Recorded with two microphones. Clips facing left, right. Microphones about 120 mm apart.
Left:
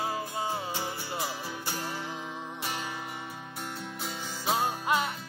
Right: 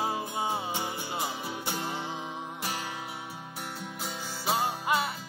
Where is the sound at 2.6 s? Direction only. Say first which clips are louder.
Left 1 dB; 10° right (ahead or behind).